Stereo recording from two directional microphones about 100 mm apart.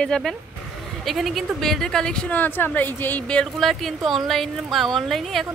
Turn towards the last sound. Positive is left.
turn(degrees=0)  # may be behind; listen again after turning